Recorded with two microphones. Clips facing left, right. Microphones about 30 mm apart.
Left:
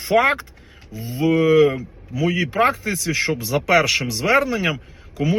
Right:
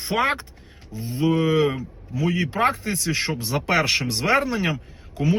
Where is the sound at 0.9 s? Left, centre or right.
Left.